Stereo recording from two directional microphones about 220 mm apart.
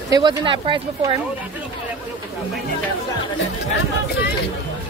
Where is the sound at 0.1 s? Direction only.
20° right (ahead or behind).